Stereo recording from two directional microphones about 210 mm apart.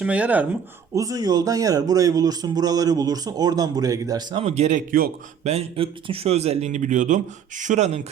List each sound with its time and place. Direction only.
0.0 s speech: 5° right (ahead or behind); by 5.5 s 40° right (ahead or behind)
5.5 s speech: 30° right (ahead or behind)